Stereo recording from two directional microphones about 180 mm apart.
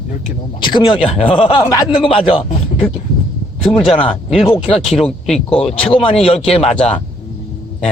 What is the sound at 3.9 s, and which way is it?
Speech, 30° left (ahead or behind).